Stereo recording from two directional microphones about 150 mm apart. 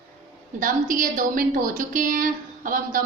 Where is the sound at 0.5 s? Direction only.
65° right (ahead or behind).